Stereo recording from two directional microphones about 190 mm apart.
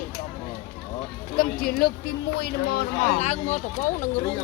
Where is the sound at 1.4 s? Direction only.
50° left (ahead or behind).